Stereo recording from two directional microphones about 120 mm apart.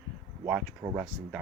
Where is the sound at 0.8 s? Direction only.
25° right (ahead or behind).